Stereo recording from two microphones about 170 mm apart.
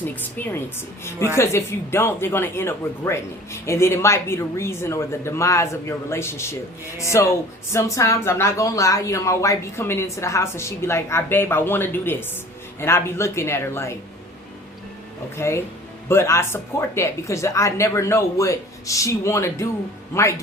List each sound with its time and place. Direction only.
0.0 s speech: 10° left (ahead or behind)
15.4 s speech: 15° left (ahead or behind)